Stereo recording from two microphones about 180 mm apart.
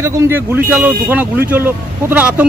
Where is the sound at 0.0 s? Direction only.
15° right (ahead or behind).